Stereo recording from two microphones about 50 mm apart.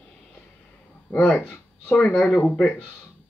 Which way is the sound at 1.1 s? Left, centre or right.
Left.